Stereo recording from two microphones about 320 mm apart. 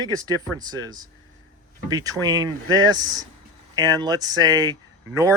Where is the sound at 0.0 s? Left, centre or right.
Centre.